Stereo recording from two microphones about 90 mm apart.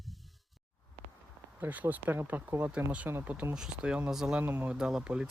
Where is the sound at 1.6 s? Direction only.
20° right (ahead or behind).